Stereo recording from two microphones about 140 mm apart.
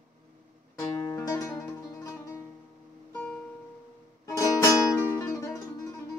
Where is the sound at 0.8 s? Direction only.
20° left (ahead or behind).